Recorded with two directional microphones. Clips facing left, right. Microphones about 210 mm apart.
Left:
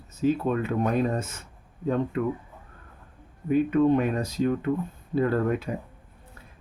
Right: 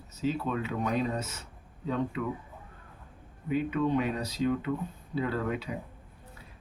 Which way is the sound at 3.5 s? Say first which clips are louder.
Left 7 dB; 50° left (ahead or behind).